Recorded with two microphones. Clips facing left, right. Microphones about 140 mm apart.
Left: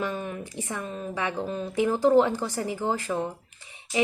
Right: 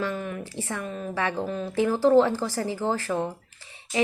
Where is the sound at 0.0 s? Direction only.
25° left (ahead or behind).